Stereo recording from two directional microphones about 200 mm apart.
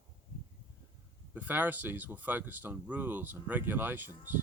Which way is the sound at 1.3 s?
10° right (ahead or behind).